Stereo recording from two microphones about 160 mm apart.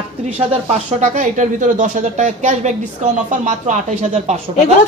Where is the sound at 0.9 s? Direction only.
50° right (ahead or behind).